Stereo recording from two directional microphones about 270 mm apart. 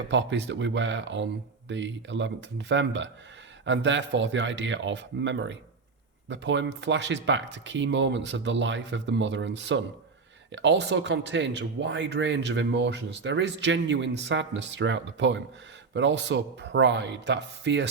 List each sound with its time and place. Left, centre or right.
0.1 s speech: right